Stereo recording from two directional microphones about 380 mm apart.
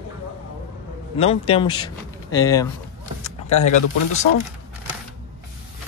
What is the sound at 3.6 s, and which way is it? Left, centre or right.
Speech, left.